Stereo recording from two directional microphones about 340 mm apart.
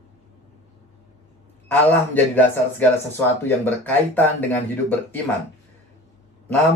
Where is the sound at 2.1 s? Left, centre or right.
Centre.